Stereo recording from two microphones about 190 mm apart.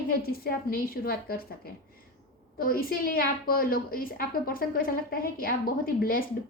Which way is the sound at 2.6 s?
50° left (ahead or behind).